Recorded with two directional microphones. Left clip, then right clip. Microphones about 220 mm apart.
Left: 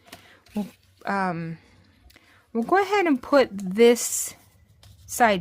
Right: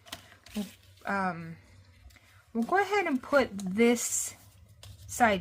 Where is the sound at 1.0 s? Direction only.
45° left (ahead or behind).